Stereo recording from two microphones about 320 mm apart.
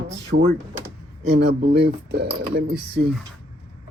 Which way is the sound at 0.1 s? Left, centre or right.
Right.